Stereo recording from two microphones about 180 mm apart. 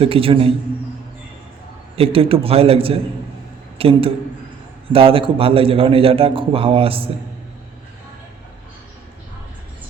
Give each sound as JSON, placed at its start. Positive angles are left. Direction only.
{"t": 0.0, "sound": "a man's voice", "side_deg": -30}
{"t": 2.0, "sound": "a man's voice", "side_deg": -30}